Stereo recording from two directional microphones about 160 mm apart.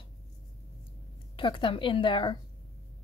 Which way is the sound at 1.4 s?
30° left (ahead or behind).